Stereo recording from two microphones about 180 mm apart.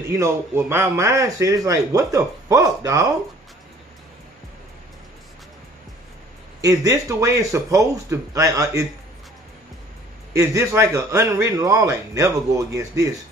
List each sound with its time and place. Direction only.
0.1 s a man's voice: 15° right (ahead or behind)
6.6 s a man's voice: 20° right (ahead or behind)
10.3 s a man's voice: 15° right (ahead or behind)